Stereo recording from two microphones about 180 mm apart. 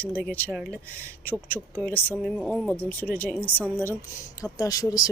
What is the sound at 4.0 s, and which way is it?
Speech, 20° left (ahead or behind).